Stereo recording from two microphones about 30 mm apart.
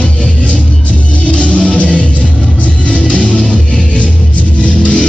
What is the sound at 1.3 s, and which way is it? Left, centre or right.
Music, left.